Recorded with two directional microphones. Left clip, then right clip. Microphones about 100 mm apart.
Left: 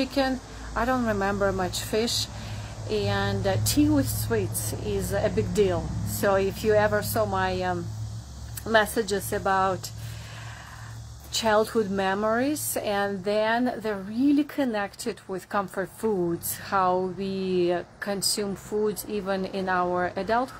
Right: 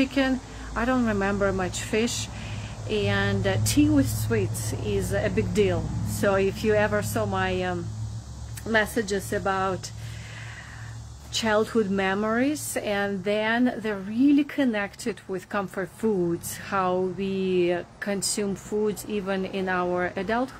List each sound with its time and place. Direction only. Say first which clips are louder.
0.0 s speech: right 1 dB; 15° right (ahead or behind)
8.6 s speech: left 2 dB; centre (ahead or behind)
11.3 s speech: left 1 dB; 15° right (ahead or behind)
16.6 s speech: left 2 dB; 20° right (ahead or behind)